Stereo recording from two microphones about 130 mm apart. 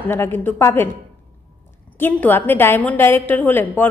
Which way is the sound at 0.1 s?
15° left (ahead or behind).